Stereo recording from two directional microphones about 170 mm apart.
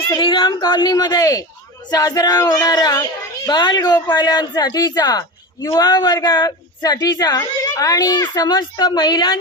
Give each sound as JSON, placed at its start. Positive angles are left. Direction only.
{"t": 0.2, "sound": "a woman's voice", "side_deg": 30}